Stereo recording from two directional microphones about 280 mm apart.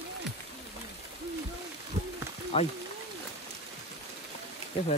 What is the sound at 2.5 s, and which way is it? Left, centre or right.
Speech, left.